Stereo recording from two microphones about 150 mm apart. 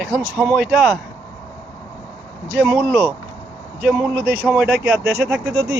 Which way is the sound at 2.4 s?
10° right (ahead or behind).